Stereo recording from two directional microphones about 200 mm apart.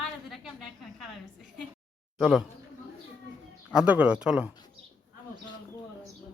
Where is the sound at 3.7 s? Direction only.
5° right (ahead or behind).